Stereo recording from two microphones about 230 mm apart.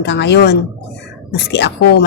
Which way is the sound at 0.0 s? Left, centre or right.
Left.